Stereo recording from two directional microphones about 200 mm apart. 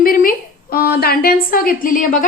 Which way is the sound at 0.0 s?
45° left (ahead or behind).